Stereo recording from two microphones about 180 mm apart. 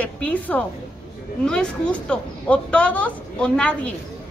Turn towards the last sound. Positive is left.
turn(degrees=5)  # may be behind; listen again after turning